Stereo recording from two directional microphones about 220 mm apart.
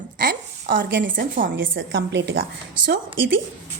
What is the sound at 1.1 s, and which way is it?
Speech, 40° right (ahead or behind).